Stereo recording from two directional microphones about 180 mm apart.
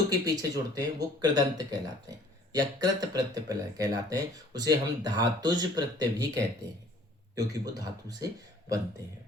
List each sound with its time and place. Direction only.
0.1 s speech: 20° right (ahead or behind)